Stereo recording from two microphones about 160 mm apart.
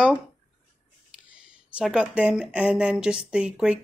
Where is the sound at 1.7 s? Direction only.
5° right (ahead or behind).